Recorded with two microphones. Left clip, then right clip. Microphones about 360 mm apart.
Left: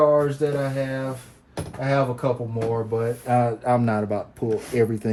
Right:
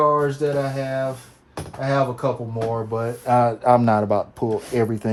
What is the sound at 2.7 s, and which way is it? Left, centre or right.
Speech, centre.